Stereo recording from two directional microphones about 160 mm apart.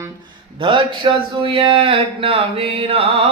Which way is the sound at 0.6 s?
30° right (ahead or behind).